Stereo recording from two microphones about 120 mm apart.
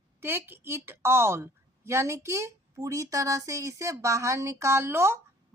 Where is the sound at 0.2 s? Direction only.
20° right (ahead or behind).